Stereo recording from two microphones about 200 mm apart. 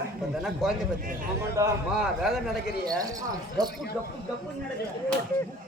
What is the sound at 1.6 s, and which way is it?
Speech, 15° right (ahead or behind).